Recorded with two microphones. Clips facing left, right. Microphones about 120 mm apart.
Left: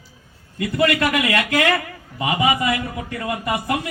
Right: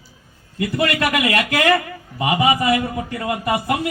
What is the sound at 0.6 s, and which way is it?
Speech, 20° right (ahead or behind).